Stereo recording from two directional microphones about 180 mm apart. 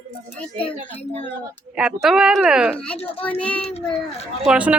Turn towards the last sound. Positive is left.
turn(degrees=-5)  # may be behind; listen again after turning